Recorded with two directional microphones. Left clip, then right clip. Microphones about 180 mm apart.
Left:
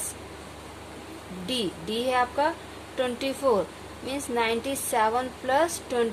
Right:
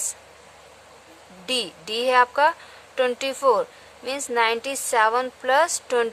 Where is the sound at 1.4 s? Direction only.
45° right (ahead or behind).